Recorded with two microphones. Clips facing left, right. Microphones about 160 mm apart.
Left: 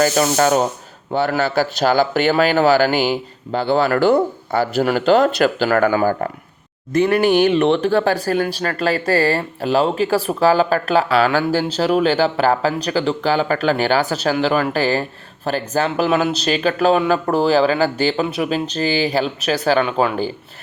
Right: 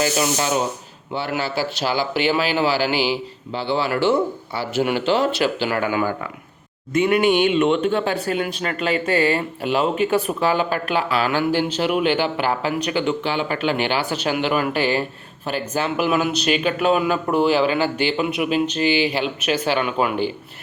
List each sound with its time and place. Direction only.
0.0 s speech: 45° left (ahead or behind)
7.4 s speech: 35° left (ahead or behind)